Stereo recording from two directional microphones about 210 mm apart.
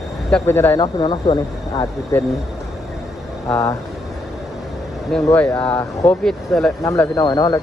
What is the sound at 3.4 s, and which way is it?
Speech, 5° left (ahead or behind).